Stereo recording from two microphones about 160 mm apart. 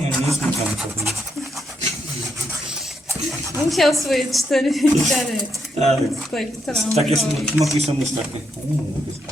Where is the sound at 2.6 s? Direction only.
5° right (ahead or behind).